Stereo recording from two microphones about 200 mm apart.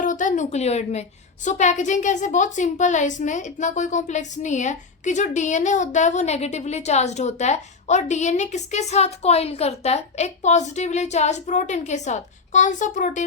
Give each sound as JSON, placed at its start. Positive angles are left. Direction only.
{"t": 0.0, "sound": "a woman's voice", "side_deg": 40}